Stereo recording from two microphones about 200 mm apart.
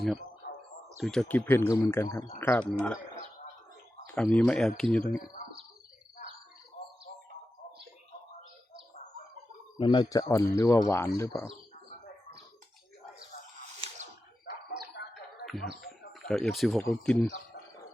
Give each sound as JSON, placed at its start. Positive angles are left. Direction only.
{"t": 0.9, "sound": "speech", "side_deg": 0}
{"t": 4.0, "sound": "speech", "side_deg": 5}
{"t": 9.7, "sound": "speech", "side_deg": 20}
{"t": 15.0, "sound": "a sound", "side_deg": 65}
{"t": 15.4, "sound": "speech", "side_deg": 0}